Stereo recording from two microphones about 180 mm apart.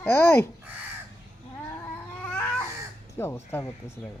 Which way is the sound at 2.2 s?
10° left (ahead or behind).